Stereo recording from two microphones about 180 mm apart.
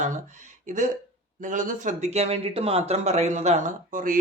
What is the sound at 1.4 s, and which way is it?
A man's voice, 45° right (ahead or behind).